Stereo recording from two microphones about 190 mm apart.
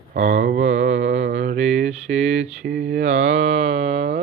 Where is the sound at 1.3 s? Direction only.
40° right (ahead or behind).